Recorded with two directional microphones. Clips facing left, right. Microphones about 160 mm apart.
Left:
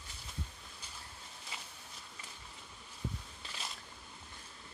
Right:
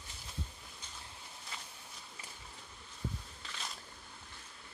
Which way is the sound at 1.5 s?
5° left (ahead or behind).